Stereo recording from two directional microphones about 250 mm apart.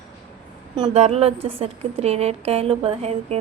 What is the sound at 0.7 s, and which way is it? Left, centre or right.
A woman's voice, right.